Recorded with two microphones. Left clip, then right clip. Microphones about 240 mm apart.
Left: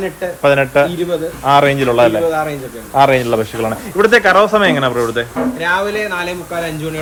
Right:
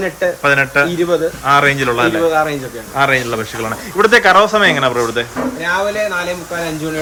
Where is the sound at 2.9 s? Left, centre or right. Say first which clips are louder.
Left 3 dB; centre.